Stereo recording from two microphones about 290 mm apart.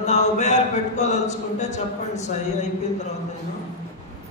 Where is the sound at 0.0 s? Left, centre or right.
Left.